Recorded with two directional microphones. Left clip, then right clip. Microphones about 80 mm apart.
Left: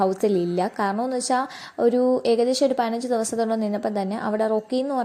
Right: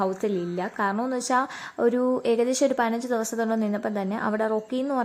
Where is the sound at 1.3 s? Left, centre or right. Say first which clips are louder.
Even; left.